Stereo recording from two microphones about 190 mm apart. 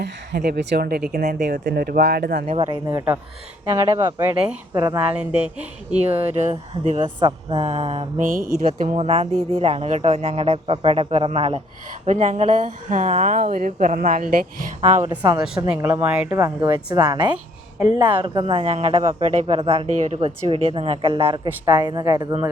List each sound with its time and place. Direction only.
0.0 s speech: 60° right (ahead or behind)
2.6 s speech: 15° right (ahead or behind)
5.5 s speech: 5° right (ahead or behind)
6.5 s speech: 35° right (ahead or behind)
7.2 s speech: 25° right (ahead or behind)
8.2 s speech: 45° right (ahead or behind)
8.9 s speech: 35° right (ahead or behind)
14.8 s speech: 35° right (ahead or behind)
15.1 s speech: 20° right (ahead or behind)
15.7 s speech: 10° right (ahead or behind)
16.6 s speech: 20° right (ahead or behind)